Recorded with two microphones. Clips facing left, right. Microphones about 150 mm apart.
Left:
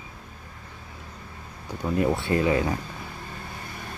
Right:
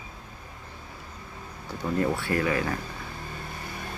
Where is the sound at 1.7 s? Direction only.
15° left (ahead or behind).